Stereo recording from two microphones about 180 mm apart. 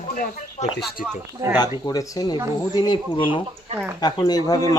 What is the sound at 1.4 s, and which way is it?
Speech, 20° right (ahead or behind).